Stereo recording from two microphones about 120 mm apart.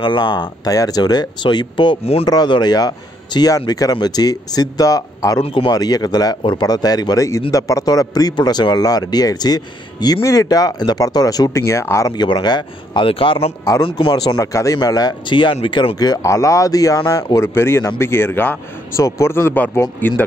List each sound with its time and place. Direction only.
0.0 s speech: 40° left (ahead or behind)
5.4 s speech: 50° left (ahead or behind)
5.7 s speech: 35° left (ahead or behind)
12.2 s speech: 35° left (ahead or behind); by 20.2 s 15° left (ahead or behind)